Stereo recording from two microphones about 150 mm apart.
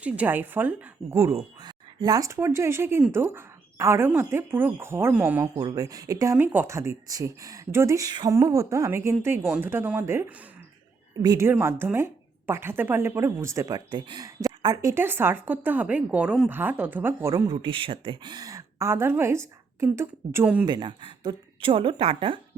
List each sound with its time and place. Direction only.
0.0 s speech: 10° right (ahead or behind)
5.5 s speech: 25° right (ahead or behind)
11.2 s speech: 25° right (ahead or behind)
11.4 s speech: 15° right (ahead or behind)
20.7 s a woman's voice: 30° right (ahead or behind)